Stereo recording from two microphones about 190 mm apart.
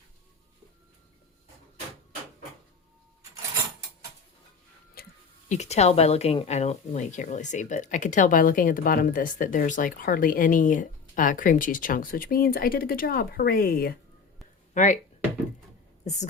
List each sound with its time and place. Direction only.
5.0 s music: 50° left (ahead or behind)
5.5 s speech: 35° left (ahead or behind); by 13.9 s 50° left (ahead or behind)
14.7 s speech: 40° left (ahead or behind)